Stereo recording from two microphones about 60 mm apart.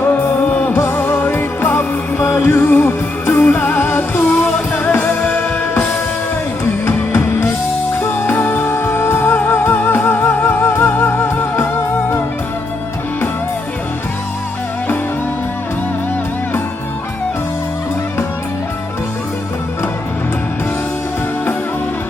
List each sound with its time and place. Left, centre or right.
0.4 s music: left
0.8 s music: left
6.8 s music: left